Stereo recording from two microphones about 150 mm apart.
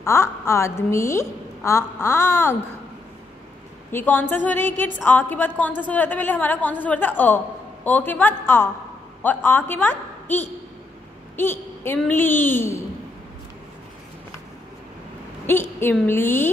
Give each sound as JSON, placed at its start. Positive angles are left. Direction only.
{"t": 0.0, "sound": "a woman's voice", "side_deg": 20}
{"t": 3.9, "sound": "a woman's voice", "side_deg": 10}
{"t": 11.3, "sound": "a woman's voice", "side_deg": 15}
{"t": 15.4, "sound": "a woman's voice", "side_deg": 15}